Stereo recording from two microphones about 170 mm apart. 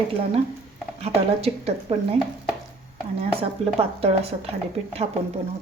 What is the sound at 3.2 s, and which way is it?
A woman's voice, 35° right (ahead or behind).